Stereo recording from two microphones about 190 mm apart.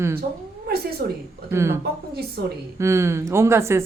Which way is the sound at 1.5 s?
15° right (ahead or behind).